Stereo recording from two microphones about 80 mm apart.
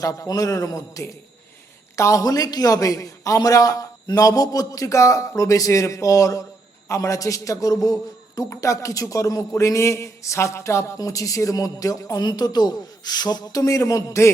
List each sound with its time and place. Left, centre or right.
0.0 s speech: left